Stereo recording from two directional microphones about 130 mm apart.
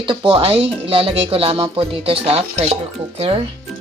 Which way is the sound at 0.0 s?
40° right (ahead or behind).